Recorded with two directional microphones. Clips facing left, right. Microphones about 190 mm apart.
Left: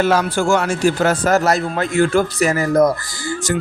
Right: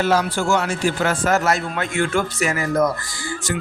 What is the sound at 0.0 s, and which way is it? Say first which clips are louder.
A man's voice: left 3 dB; 50° left (ahead or behind).